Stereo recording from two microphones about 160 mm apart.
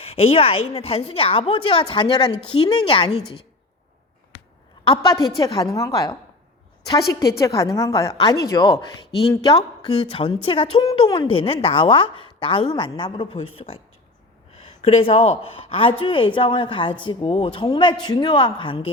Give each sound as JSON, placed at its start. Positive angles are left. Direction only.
{"t": 0.0, "sound": "a woman's voice", "side_deg": 40}
{"t": 4.9, "sound": "a woman's voice", "side_deg": 30}